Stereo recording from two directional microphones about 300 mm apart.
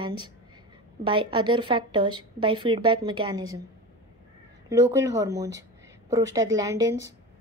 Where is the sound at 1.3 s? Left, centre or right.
Centre.